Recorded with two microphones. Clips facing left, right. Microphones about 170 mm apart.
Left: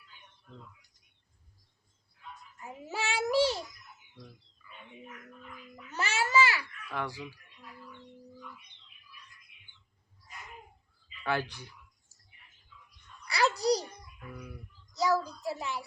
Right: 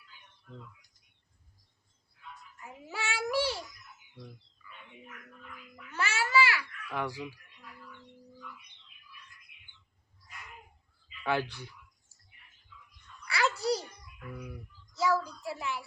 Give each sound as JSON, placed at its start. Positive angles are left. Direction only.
{"t": 2.6, "sound": "child singing", "side_deg": 30}
{"t": 5.9, "sound": "babbling", "side_deg": 40}
{"t": 6.1, "sound": "babbling", "side_deg": 20}
{"t": 6.9, "sound": "speech", "side_deg": -5}
{"t": 11.2, "sound": "speech", "side_deg": 0}
{"t": 13.2, "sound": "babbling", "side_deg": 35}
{"t": 14.9, "sound": "a child's voice", "side_deg": 35}